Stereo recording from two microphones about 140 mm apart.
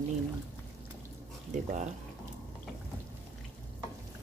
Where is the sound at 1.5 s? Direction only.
60° right (ahead or behind).